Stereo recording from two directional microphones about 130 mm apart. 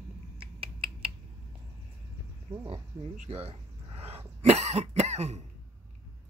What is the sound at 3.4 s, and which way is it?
Cough, 50° right (ahead or behind).